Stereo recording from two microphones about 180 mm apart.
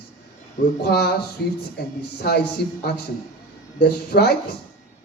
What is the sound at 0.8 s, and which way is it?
A man's voice, 65° left (ahead or behind).